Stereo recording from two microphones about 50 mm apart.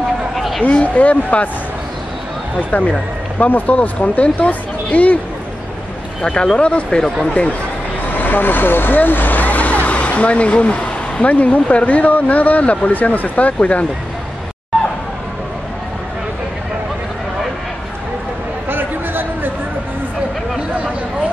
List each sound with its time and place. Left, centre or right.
0.6 s speech: left
3.3 s speech: left
6.2 s speech: centre
8.2 s speech: left
18.7 s a sound: right